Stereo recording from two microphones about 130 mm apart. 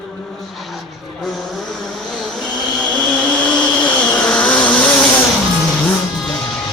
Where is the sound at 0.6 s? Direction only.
Centre (ahead or behind).